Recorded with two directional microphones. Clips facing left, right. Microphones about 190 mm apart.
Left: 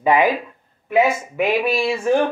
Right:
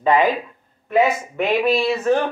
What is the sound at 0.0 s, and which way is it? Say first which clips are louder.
Speech: even; 10° left (ahead or behind).